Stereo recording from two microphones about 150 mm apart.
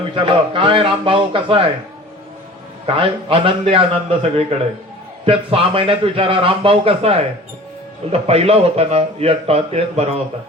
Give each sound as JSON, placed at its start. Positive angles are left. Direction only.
{"t": 0.0, "sound": "speech", "side_deg": -35}
{"t": 2.8, "sound": "speech", "side_deg": -35}